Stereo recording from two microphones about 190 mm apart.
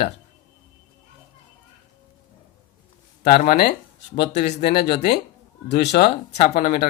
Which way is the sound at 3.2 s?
50° left (ahead or behind).